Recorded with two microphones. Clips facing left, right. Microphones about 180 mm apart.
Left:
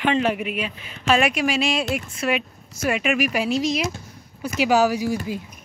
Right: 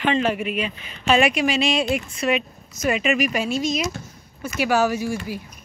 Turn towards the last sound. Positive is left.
turn(degrees=15)  # may be behind; listen again after turning